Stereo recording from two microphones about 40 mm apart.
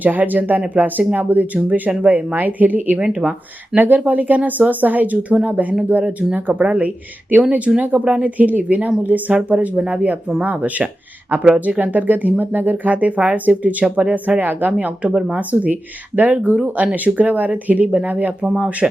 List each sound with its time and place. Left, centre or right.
0.0 s speech: right
5.5 s speech: right
18.4 s speech: right